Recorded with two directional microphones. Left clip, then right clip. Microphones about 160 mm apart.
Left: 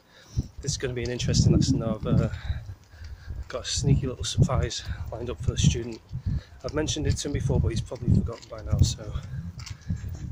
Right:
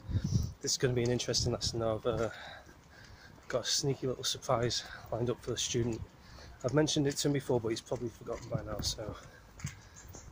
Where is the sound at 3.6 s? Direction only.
10° left (ahead or behind).